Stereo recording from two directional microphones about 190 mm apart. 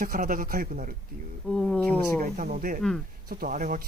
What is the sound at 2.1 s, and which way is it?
Speech, 40° right (ahead or behind).